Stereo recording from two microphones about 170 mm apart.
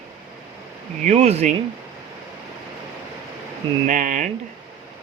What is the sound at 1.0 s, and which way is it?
Speech, 40° right (ahead or behind).